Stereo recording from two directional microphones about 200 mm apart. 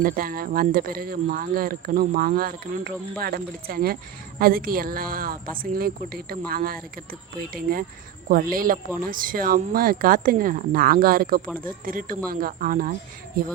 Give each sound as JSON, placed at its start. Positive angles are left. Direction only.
{"t": 0.0, "sound": "speech", "side_deg": -45}